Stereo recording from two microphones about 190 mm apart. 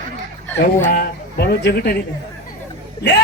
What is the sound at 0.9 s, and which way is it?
Speech, 55° left (ahead or behind).